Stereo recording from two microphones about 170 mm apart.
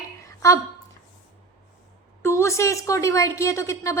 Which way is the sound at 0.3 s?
20° left (ahead or behind).